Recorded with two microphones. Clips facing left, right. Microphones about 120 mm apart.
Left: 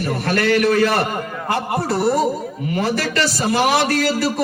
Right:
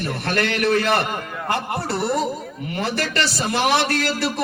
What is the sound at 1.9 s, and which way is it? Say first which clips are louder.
A man's voice: left 5 dB; 45° left (ahead or behind).